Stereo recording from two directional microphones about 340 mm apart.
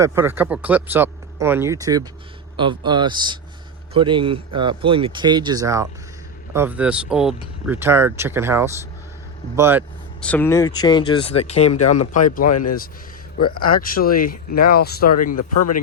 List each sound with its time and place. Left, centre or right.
0.0 s speech: centre
11.6 s speech: left
13.4 s speech: left
15.4 s speech: left